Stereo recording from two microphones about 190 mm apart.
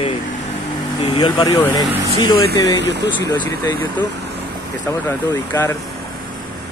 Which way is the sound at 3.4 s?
15° left (ahead or behind).